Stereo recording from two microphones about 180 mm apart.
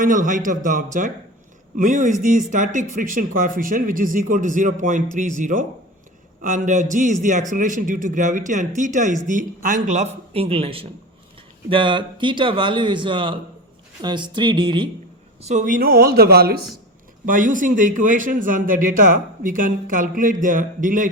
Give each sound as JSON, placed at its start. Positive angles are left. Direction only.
{"t": 0.0, "sound": "a man's voice", "side_deg": -45}
{"t": 15.4, "sound": "speech", "side_deg": -40}
{"t": 17.2, "sound": "a man's voice", "side_deg": -45}